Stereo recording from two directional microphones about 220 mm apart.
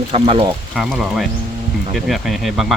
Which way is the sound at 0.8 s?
Centre (ahead or behind).